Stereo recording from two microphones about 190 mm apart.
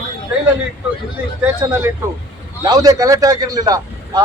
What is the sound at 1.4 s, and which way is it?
A man's voice, 15° right (ahead or behind).